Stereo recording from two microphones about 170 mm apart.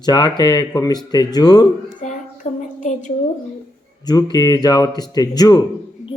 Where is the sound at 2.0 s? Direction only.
45° left (ahead or behind).